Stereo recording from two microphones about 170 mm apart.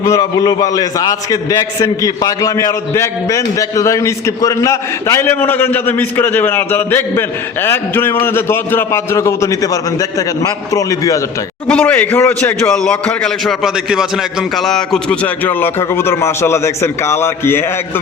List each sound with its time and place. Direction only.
0.0 s a man's voice: 20° left (ahead or behind)
11.7 s a man's voice: 10° left (ahead or behind)